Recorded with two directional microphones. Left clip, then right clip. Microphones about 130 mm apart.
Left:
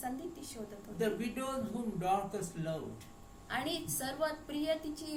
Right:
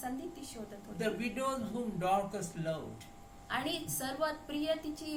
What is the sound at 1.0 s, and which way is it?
A man's voice, 20° right (ahead or behind).